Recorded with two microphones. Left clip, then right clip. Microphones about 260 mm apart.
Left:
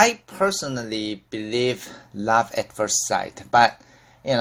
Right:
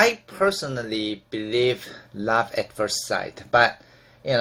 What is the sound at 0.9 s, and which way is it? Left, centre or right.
Speech, left.